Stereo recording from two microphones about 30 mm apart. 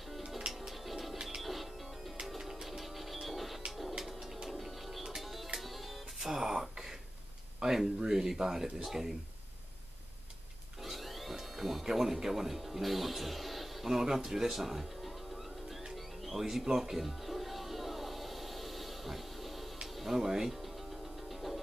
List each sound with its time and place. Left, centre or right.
0.5 s music: centre
4.6 s bird: centre
5.2 s music: centre
6.3 s speech: centre
10.8 s a sound: centre
11.3 s speech: centre
17.0 s music: centre
20.2 s speech: centre
20.5 s music: centre